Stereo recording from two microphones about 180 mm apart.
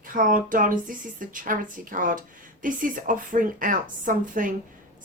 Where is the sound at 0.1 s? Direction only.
50° right (ahead or behind).